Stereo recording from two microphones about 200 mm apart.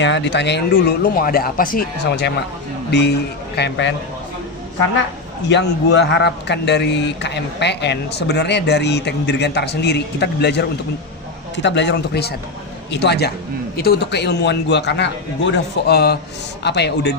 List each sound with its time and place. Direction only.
0.0 s a man's voice: 65° left (ahead or behind)
5.5 s a man's voice: 60° left (ahead or behind)